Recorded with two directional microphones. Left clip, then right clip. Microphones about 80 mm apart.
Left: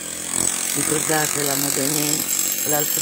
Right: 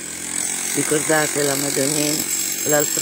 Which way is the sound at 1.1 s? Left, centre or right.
Right.